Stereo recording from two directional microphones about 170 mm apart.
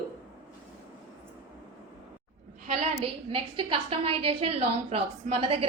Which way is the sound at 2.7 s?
35° right (ahead or behind).